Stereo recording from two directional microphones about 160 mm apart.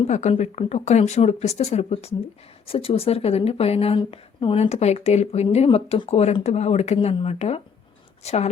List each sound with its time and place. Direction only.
0.0 s speech: 45° left (ahead or behind)